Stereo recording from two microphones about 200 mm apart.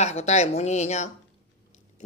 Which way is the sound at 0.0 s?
35° left (ahead or behind).